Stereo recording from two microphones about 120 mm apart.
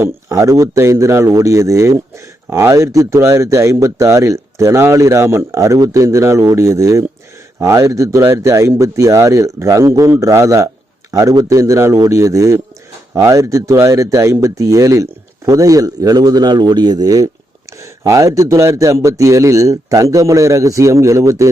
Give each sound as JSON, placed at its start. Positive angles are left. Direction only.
{"t": 0.0, "sound": "a man's voice", "side_deg": -25}